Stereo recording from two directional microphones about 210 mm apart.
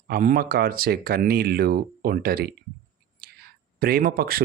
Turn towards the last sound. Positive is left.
turn(degrees=-45)  # may be behind; listen again after turning